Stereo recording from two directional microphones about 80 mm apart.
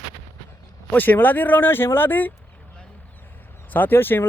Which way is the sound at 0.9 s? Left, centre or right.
Left.